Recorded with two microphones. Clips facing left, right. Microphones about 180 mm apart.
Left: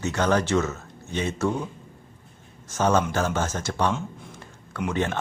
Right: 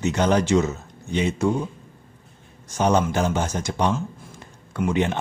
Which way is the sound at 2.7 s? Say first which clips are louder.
Right 2 dB; 15° right (ahead or behind).